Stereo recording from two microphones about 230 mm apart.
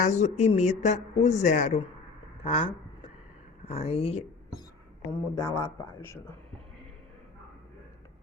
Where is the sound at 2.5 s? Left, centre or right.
Left.